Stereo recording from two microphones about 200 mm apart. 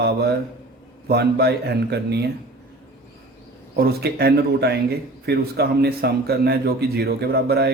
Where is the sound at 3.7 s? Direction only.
50° right (ahead or behind).